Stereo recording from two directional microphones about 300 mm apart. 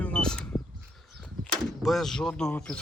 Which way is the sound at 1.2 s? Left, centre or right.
Centre.